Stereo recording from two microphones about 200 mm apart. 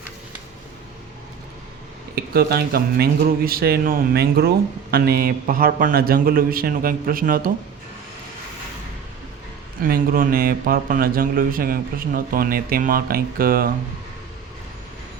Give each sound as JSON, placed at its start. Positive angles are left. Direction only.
{"t": 2.1, "sound": "speech", "side_deg": -50}
{"t": 9.8, "sound": "speech", "side_deg": -45}